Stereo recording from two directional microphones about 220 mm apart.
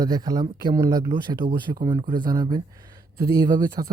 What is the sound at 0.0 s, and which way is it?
Speech, 15° right (ahead or behind).